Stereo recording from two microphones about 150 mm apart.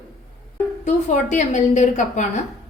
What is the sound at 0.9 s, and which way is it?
A woman's voice, 50° left (ahead or behind).